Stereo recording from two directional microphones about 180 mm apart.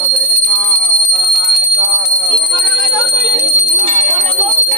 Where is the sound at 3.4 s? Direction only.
40° right (ahead or behind).